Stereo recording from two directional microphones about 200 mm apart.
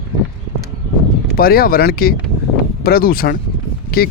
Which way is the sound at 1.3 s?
50° left (ahead or behind).